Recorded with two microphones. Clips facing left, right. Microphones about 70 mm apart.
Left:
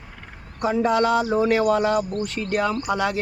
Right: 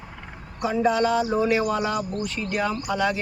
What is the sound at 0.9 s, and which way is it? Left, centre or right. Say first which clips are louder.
Speech: left 2 dB; left.